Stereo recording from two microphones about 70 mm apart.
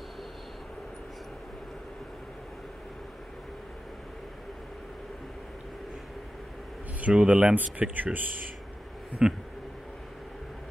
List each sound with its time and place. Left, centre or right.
7.0 s speech: centre
7.9 s speech: right
9.2 s speech: centre